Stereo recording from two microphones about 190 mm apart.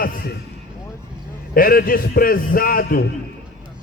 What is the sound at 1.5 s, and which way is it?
A man's voice, 50° left (ahead or behind).